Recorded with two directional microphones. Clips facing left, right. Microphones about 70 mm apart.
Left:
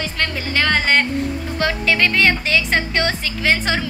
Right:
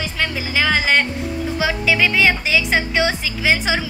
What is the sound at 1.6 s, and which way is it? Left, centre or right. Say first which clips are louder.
A woman's voice: even; centre.